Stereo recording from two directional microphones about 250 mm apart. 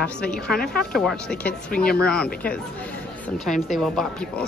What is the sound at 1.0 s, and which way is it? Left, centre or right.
A woman's voice, centre.